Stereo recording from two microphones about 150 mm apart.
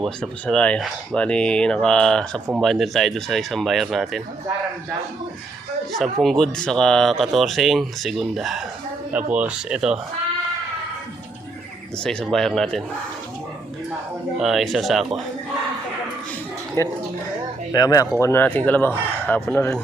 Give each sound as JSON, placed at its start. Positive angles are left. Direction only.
{"t": 0.0, "sound": "speech", "side_deg": 5}
{"t": 6.0, "sound": "speech", "side_deg": 0}
{"t": 12.0, "sound": "speech", "side_deg": 5}
{"t": 14.3, "sound": "speech", "side_deg": 0}
{"t": 16.8, "sound": "speech", "side_deg": 20}